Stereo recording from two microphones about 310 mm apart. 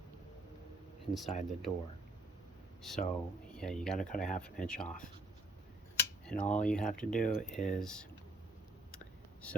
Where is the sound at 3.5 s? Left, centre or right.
Centre.